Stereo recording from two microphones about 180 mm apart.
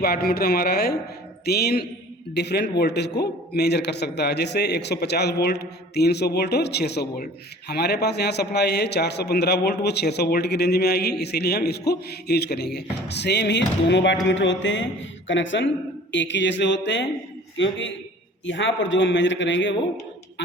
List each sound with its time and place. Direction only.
0.0 s a man's voice: 60° left (ahead or behind); by 15.7 s 90° left
16.1 s a man's voice: 80° left
17.6 s a man's voice: 90° left